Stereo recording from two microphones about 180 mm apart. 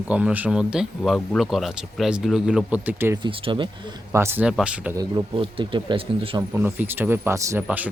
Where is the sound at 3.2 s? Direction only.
25° right (ahead or behind).